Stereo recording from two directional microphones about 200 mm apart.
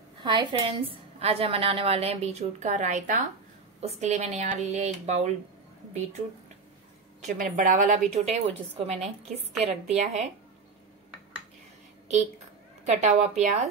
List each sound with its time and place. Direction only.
0.2 s a woman's voice: 25° right (ahead or behind)
7.2 s a woman's voice: 40° right (ahead or behind)
12.8 s a woman's voice: 35° right (ahead or behind)